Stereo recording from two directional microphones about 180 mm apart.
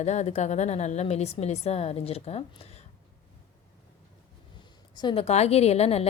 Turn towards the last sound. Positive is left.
turn(degrees=35)  # may be behind; listen again after turning